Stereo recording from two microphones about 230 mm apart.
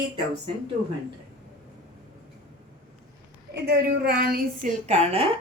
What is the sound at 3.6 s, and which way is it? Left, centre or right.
A woman's voice, right.